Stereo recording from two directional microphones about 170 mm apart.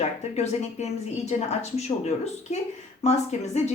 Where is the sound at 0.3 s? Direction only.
40° left (ahead or behind).